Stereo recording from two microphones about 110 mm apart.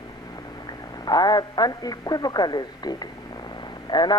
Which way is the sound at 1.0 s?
40° left (ahead or behind).